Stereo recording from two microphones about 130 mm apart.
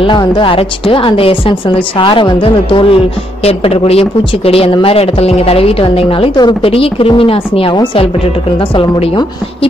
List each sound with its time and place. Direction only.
0.0 s a woman's voice: 35° left (ahead or behind)